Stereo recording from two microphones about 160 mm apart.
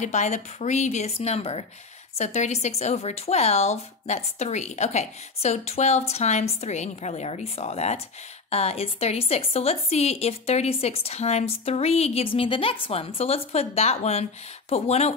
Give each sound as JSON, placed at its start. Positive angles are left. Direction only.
{"t": 0.0, "sound": "a woman's voice", "side_deg": 45}